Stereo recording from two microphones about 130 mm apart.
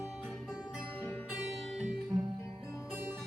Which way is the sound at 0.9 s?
15° left (ahead or behind).